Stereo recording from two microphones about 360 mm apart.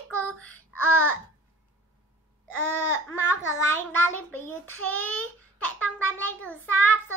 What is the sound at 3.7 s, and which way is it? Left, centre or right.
Speech, centre.